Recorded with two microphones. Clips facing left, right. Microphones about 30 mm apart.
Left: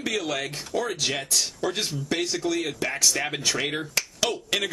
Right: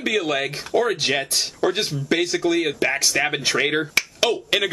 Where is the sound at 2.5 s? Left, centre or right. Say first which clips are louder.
Right 6 dB; right.